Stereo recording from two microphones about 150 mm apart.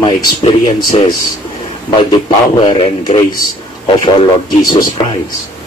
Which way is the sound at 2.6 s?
35° left (ahead or behind).